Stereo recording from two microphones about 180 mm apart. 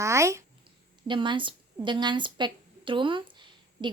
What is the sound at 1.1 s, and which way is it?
A woman's voice, 25° right (ahead or behind).